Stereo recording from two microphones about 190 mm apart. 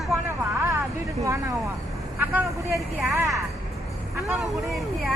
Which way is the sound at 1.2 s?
15° right (ahead or behind).